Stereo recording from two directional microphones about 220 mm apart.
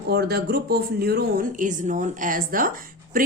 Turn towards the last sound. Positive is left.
turn(degrees=-40)  # may be behind; listen again after turning